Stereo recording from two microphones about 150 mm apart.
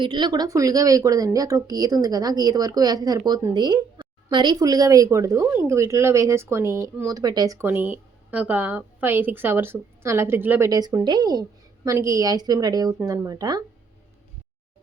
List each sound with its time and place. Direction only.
0.0 s speech: 30° right (ahead or behind); by 10.7 s 15° right (ahead or behind)
10.7 s speech: 25° right (ahead or behind)